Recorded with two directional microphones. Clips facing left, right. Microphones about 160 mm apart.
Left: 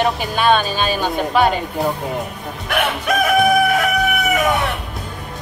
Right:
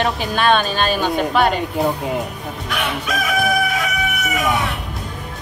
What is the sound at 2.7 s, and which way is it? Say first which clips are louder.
Chicken: left 5 dB; 60° left (ahead or behind).